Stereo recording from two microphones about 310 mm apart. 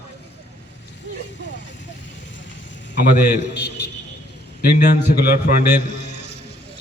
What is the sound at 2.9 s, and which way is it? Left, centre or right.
A man's voice, left.